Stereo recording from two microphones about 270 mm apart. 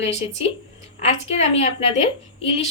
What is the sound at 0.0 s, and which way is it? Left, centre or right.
A woman's voice, left.